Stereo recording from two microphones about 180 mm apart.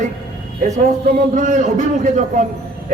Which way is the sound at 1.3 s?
45° right (ahead or behind).